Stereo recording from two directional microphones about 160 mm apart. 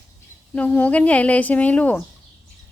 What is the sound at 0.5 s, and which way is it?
A woman's voice, 10° left (ahead or behind).